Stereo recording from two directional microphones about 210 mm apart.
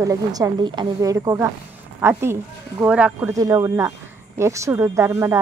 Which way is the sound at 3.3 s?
15° right (ahead or behind).